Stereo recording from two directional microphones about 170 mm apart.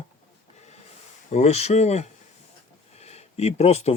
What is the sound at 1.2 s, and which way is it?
Speech, 40° left (ahead or behind).